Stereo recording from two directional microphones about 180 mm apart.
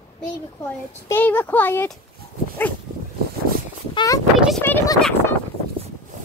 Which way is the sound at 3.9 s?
25° left (ahead or behind).